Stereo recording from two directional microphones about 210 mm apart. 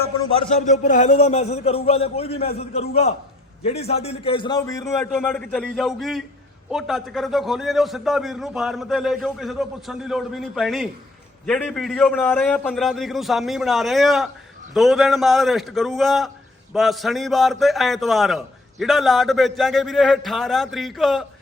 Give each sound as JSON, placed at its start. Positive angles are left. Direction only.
{"t": 0.2, "sound": "a man's voice", "side_deg": 25}